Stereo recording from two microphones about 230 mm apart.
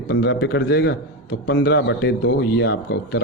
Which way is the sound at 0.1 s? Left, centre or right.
Left.